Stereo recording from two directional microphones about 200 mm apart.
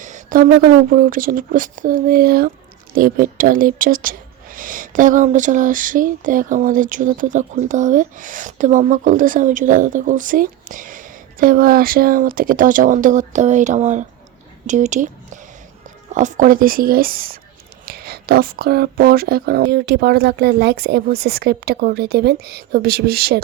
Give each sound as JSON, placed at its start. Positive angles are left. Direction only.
{"t": 0.0, "sound": "speech", "side_deg": -40}